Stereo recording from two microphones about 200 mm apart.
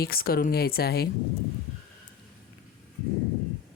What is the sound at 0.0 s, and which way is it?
Speech, 50° left (ahead or behind).